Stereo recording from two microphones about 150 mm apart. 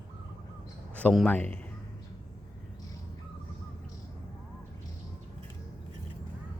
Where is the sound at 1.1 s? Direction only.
5° left (ahead or behind).